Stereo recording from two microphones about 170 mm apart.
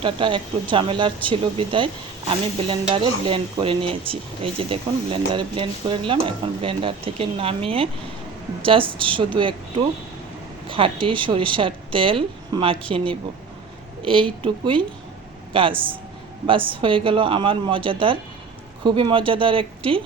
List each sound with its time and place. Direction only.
0.0 s a woman's voice: 30° right (ahead or behind)